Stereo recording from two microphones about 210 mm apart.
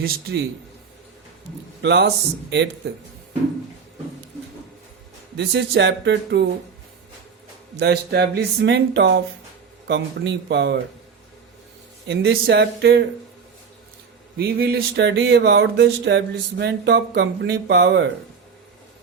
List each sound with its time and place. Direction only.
0.0 s speech: 45° right (ahead or behind)
1.8 s speech: 55° right (ahead or behind)
5.4 s speech: 55° right (ahead or behind)
7.8 s speech: 50° right (ahead or behind)
12.0 s speech: 55° right (ahead or behind)
14.3 s speech: 50° right (ahead or behind)